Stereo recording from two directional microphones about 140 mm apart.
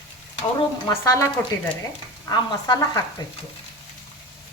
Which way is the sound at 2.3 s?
25° left (ahead or behind).